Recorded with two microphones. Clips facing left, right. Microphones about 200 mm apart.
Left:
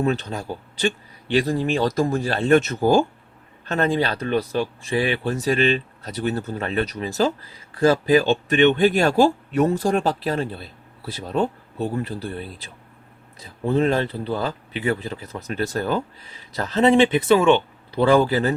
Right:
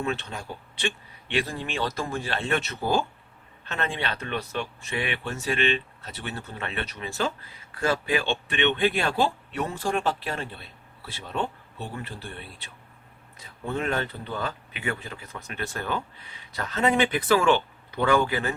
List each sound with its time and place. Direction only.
0.0 s speech: 40° left (ahead or behind); by 17.6 s 25° left (ahead or behind)
17.9 s speech: 35° left (ahead or behind)